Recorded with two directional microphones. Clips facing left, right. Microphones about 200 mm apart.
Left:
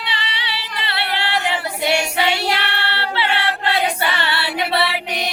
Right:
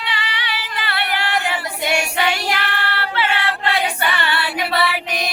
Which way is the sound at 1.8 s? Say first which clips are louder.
Left 1 dB; 25° left (ahead or behind).